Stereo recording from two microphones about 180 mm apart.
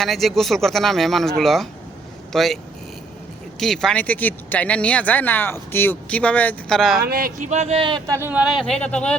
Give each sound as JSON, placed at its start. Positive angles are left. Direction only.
{"t": 0.0, "sound": "speech", "side_deg": 0}
{"t": 3.6, "sound": "speech", "side_deg": 0}
{"t": 7.0, "sound": "speech", "side_deg": -55}